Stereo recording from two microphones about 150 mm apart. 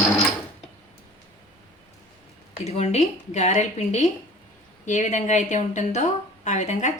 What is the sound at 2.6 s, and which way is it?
A woman's voice, 45° left (ahead or behind).